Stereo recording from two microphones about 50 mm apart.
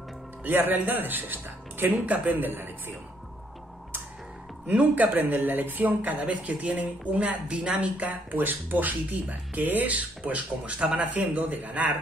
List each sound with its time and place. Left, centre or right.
0.4 s speech: right
4.6 s speech: right
6.2 s a woman's voice: right